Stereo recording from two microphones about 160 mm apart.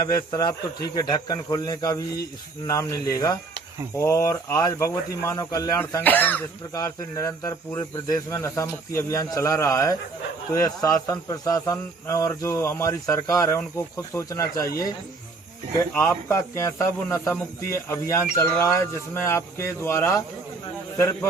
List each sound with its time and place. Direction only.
0.3 s speech: 25° left (ahead or behind)
16.0 s speech: 15° left (ahead or behind)